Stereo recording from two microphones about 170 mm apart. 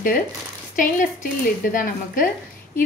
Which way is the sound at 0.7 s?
55° left (ahead or behind).